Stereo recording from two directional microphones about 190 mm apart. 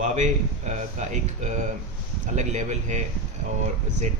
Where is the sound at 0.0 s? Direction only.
40° right (ahead or behind).